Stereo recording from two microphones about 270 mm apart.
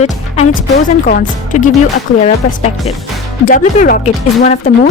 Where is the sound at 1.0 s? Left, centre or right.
Left.